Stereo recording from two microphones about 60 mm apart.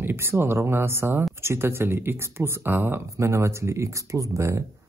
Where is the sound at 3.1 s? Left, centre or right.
Right.